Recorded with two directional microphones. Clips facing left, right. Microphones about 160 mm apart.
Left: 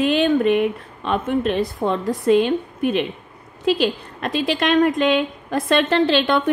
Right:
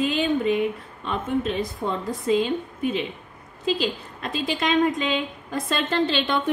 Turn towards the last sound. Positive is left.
turn(degrees=65)  # may be behind; listen again after turning